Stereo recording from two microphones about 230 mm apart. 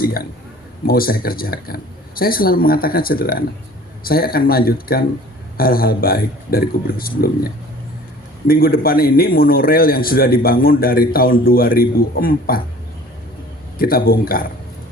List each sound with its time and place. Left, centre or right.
0.9 s a man's voice: left
13.7 s a man's voice: left